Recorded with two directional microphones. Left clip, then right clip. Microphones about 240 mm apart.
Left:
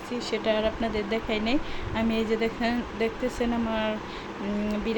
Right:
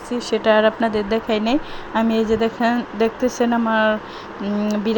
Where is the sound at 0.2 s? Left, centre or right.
Right.